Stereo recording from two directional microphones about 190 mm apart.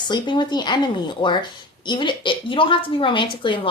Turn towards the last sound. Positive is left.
turn(degrees=25)  # may be behind; listen again after turning